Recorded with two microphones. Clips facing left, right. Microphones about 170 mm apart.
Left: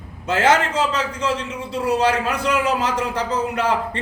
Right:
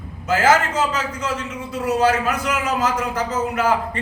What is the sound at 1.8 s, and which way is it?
A man's voice, 30° left (ahead or behind).